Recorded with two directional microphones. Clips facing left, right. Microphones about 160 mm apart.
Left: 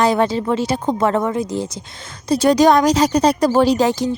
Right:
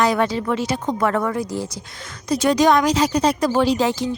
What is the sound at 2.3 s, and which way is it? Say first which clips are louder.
A woman's voice: left 3 dB; 35° left (ahead or behind).